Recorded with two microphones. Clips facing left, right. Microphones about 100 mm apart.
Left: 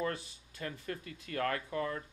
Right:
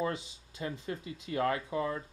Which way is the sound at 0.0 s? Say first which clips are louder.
Right 2 dB; 20° right (ahead or behind).